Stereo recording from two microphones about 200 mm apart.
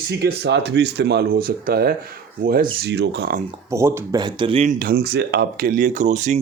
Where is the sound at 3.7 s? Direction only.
15° right (ahead or behind); by 6.4 s 35° right (ahead or behind).